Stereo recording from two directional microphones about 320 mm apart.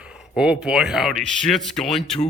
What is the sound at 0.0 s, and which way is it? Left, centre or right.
Speech, centre.